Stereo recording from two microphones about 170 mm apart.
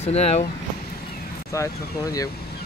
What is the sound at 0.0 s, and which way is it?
Speech, 40° left (ahead or behind).